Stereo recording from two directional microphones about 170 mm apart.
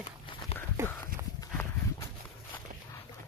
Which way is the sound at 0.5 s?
35° left (ahead or behind).